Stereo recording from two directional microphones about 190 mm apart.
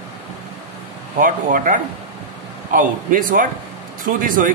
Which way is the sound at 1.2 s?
45° right (ahead or behind).